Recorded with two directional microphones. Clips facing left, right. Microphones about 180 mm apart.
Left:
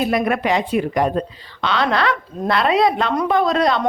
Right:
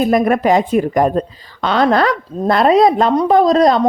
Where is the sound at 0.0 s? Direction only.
45° right (ahead or behind).